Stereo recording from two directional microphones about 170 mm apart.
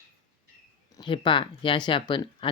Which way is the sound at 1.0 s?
30° left (ahead or behind).